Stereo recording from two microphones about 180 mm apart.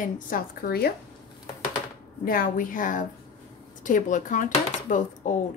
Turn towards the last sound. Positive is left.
turn(degrees=45)  # may be behind; listen again after turning